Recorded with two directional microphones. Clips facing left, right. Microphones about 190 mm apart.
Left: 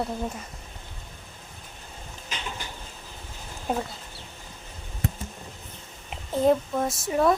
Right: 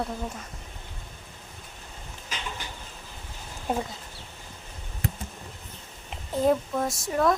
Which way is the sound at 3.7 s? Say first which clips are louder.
Even; centre (ahead or behind).